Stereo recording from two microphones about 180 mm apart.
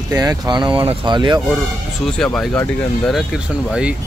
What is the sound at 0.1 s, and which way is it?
Speech, 20° right (ahead or behind).